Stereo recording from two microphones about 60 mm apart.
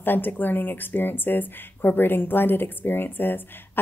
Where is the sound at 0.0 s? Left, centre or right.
Left.